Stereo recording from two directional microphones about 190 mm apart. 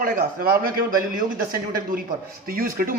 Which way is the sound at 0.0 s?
50° right (ahead or behind).